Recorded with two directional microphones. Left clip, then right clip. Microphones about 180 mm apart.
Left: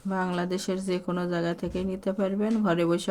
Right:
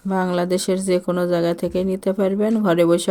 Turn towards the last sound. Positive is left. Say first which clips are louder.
# right 9 dB
turn(degrees=-40)  # may be behind; listen again after turning